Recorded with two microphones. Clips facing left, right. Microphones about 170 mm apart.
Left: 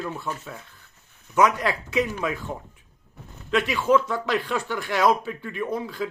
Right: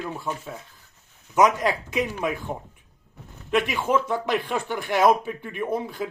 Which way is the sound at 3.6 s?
50° right (ahead or behind).